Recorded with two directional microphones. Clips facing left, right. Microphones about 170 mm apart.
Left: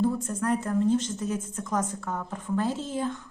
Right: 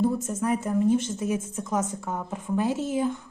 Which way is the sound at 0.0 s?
10° right (ahead or behind).